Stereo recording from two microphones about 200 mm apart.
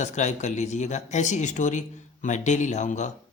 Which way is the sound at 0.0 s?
35° left (ahead or behind).